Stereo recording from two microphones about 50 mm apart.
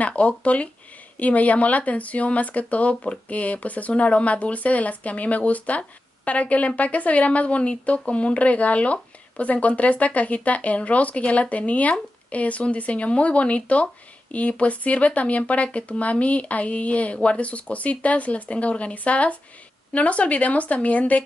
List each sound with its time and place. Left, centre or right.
0.0 s speech: left